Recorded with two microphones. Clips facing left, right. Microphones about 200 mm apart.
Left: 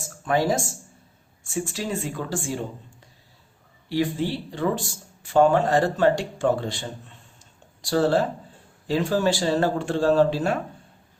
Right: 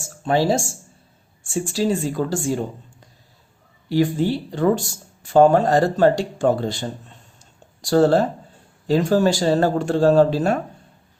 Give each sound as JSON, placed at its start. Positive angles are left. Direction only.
{"t": 0.0, "sound": "speech", "side_deg": -30}
{"t": 3.8, "sound": "speech", "side_deg": -45}